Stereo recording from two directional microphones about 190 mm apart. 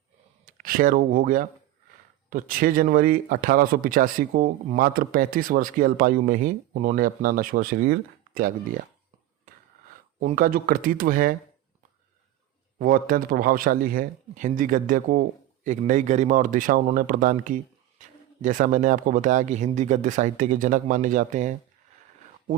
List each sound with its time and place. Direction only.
0.4 s speech: 50° right (ahead or behind)
10.2 s speech: 45° right (ahead or behind)
12.8 s speech: 45° right (ahead or behind)